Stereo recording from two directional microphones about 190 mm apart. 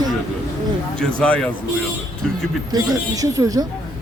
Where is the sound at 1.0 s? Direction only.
5° left (ahead or behind).